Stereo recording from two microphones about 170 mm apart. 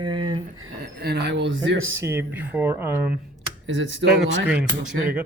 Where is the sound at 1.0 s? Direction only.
75° right (ahead or behind).